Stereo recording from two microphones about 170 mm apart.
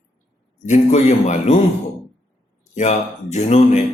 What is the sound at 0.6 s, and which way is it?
Speech, 45° left (ahead or behind).